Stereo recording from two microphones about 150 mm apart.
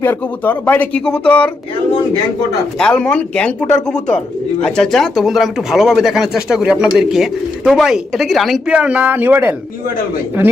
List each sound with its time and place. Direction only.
0.0 s speech: 10° left (ahead or behind)
2.7 s speech: 5° left (ahead or behind); by 9.6 s 15° right (ahead or behind)